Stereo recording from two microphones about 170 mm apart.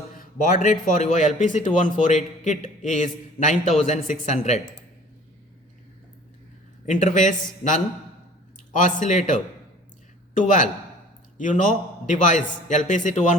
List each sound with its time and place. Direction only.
0.1 s a man's voice: 55° left (ahead or behind)
6.8 s a man's voice: 45° left (ahead or behind)